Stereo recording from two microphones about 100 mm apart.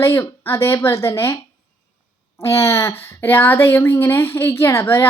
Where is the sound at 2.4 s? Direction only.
30° left (ahead or behind).